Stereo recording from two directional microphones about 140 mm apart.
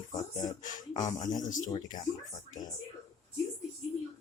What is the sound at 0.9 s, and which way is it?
Speech, 30° left (ahead or behind).